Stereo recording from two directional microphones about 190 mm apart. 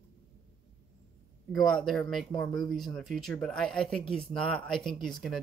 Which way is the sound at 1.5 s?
Centre (ahead or behind).